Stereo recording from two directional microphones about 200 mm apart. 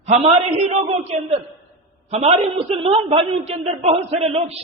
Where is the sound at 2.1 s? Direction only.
30° right (ahead or behind).